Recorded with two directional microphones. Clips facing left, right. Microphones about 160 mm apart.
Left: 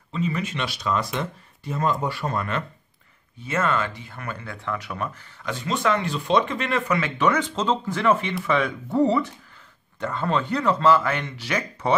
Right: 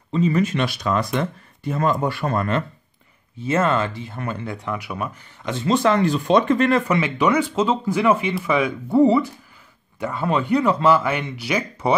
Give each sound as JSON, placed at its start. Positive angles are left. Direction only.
{"t": 0.1, "sound": "speech", "side_deg": -40}
{"t": 3.4, "sound": "speech", "side_deg": -30}
{"t": 5.4, "sound": "speech", "side_deg": -25}
{"t": 6.9, "sound": "speech", "side_deg": -15}